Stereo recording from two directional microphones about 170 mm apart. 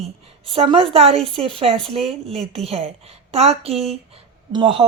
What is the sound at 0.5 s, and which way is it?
A woman's voice, 35° right (ahead or behind).